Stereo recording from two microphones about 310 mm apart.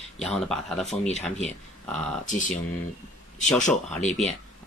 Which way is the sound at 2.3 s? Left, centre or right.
Left.